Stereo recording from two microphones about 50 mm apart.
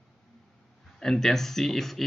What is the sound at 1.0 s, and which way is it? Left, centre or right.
Speech, centre.